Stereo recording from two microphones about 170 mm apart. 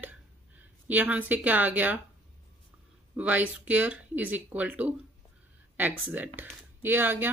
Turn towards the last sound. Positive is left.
turn(degrees=-10)  # may be behind; listen again after turning